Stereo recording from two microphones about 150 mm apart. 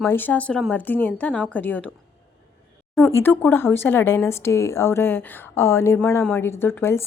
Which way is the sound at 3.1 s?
10° left (ahead or behind).